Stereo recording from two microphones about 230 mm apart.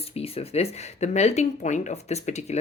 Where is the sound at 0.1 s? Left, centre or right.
Left.